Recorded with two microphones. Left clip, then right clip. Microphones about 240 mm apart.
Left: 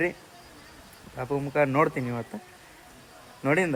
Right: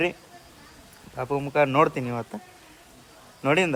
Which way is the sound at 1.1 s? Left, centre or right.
Centre.